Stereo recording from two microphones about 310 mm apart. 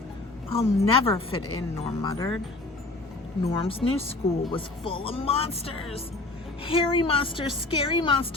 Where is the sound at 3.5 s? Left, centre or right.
Centre.